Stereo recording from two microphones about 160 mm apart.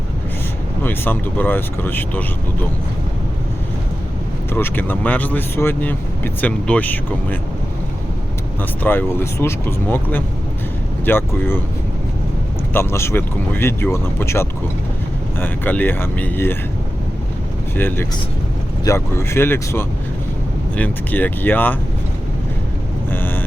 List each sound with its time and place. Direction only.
0.8 s speech: 10° left (ahead or behind)
4.5 s speech: 10° left (ahead or behind)
8.8 s speech: 15° left (ahead or behind)
12.7 s speech: 15° left (ahead or behind)
17.7 s speech: 15° left (ahead or behind)
23.0 s vehicle: 15° left (ahead or behind)